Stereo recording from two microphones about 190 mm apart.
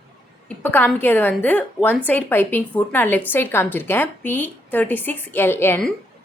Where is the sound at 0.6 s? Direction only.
10° left (ahead or behind).